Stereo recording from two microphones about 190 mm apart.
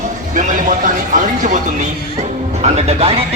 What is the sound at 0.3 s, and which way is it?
Speech, 40° right (ahead or behind).